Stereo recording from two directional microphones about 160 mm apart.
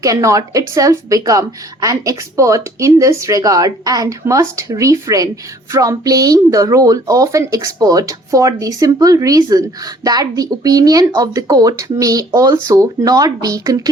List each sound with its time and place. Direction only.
0.0 s speech: 20° right (ahead or behind)